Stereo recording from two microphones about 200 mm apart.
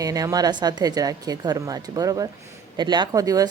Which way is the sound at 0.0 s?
15° right (ahead or behind).